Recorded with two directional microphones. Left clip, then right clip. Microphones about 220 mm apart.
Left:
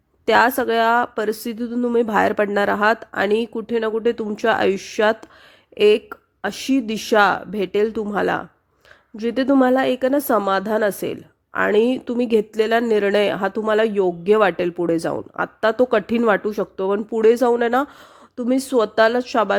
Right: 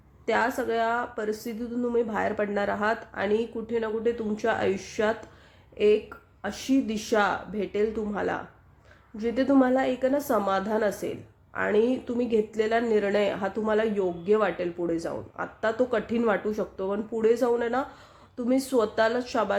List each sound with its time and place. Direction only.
0.3 s a woman's voice: 45° left (ahead or behind)